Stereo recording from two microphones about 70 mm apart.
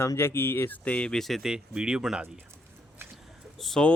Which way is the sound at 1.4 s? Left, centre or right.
Centre.